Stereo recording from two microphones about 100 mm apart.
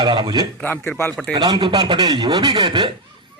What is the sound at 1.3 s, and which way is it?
A man's voice, 45° right (ahead or behind).